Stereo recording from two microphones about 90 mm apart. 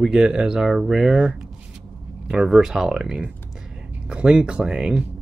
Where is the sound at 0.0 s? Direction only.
10° right (ahead or behind).